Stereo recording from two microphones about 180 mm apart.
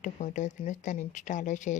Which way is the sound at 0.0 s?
45° left (ahead or behind).